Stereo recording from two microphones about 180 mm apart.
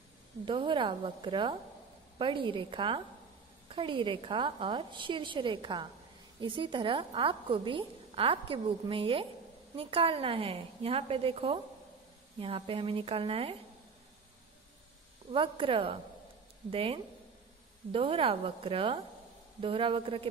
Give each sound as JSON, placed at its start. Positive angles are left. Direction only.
{"t": 0.5, "sound": "a woman's voice", "side_deg": -30}
{"t": 15.3, "sound": "a woman's voice", "side_deg": -30}